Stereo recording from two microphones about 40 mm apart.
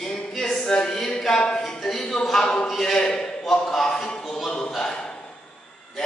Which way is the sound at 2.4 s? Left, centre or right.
Left.